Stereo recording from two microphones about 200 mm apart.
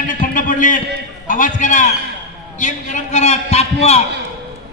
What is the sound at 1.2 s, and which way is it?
Speech, 40° left (ahead or behind).